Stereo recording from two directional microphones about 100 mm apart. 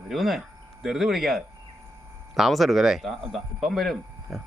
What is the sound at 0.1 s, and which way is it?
Speech, centre (ahead or behind).